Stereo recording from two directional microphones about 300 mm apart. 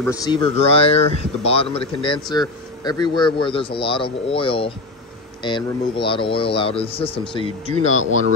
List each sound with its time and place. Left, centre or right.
0.0 s speech: centre